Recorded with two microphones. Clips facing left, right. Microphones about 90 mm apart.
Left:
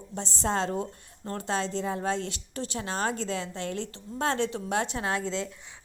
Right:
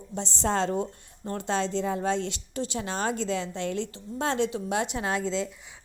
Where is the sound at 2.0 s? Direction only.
25° right (ahead or behind).